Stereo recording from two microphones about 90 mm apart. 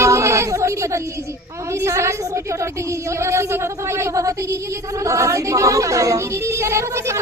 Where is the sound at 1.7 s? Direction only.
30° right (ahead or behind).